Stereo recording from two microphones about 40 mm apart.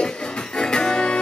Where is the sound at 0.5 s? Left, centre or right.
Centre.